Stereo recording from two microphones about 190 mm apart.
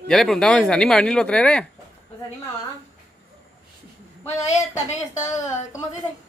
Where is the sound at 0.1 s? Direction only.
Centre (ahead or behind).